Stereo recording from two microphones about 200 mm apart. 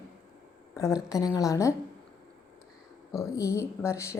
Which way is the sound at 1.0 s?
15° left (ahead or behind).